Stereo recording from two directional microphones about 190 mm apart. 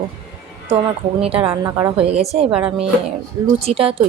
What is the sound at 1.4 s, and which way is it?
Speech, 20° right (ahead or behind).